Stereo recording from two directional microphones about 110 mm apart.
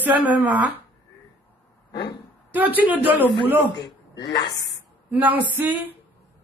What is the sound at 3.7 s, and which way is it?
Speech, 40° left (ahead or behind).